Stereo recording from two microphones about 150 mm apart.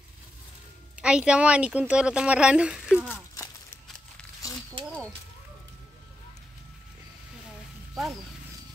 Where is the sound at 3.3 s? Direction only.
20° left (ahead or behind).